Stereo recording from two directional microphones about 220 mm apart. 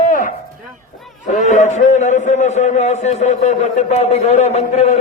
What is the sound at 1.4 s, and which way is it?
A man's voice, 30° left (ahead or behind).